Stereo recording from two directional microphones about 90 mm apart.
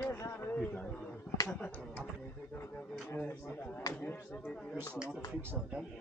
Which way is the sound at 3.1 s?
20° left (ahead or behind).